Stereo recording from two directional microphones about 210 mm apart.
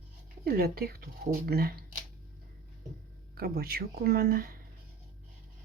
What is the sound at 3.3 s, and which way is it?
Speech, 45° right (ahead or behind).